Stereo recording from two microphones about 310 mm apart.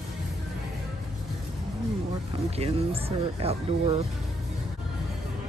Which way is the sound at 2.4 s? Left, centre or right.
Centre.